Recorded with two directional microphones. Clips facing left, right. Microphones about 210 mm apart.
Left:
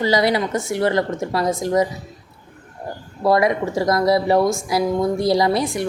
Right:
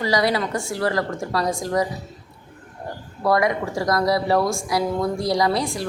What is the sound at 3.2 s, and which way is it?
A woman's voice, 25° left (ahead or behind).